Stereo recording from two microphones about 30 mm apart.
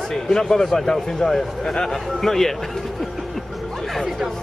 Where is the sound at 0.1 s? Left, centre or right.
Centre.